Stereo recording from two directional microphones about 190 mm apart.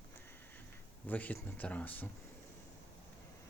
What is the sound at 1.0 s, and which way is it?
Speech, 10° left (ahead or behind).